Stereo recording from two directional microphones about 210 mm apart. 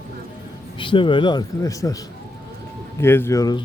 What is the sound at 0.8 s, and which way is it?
Speech, 25° left (ahead or behind).